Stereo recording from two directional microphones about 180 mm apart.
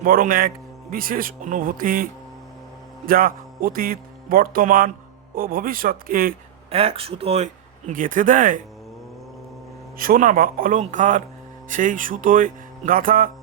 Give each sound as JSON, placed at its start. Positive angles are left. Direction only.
{"t": 0.0, "sound": "speech", "side_deg": -50}
{"t": 3.1, "sound": "speech", "side_deg": -50}
{"t": 6.7, "sound": "speech", "side_deg": -35}
{"t": 10.0, "sound": "speech", "side_deg": -50}